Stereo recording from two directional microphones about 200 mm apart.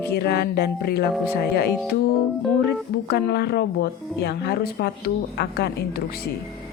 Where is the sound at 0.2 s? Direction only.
55° left (ahead or behind).